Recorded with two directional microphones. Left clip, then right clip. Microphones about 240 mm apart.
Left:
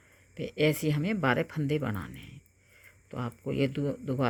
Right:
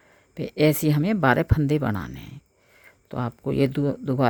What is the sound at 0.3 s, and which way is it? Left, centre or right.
Speech, right.